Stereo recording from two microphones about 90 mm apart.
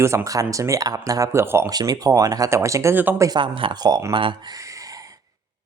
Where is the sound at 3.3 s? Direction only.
70° right (ahead or behind).